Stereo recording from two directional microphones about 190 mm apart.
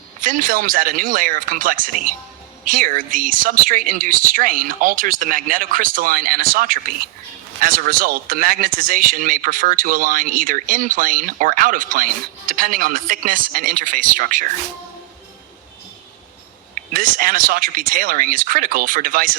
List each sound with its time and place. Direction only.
0.2 s a man's voice: 45° right (ahead or behind)
16.7 s a man's voice: 45° right (ahead or behind)